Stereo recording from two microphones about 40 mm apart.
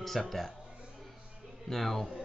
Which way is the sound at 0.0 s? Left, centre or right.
Centre.